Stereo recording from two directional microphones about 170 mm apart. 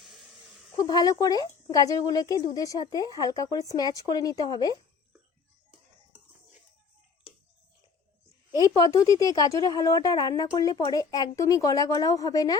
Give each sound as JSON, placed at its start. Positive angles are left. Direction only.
{"t": 0.8, "sound": "a woman's voice", "side_deg": 25}
{"t": 9.1, "sound": "a woman's voice", "side_deg": 20}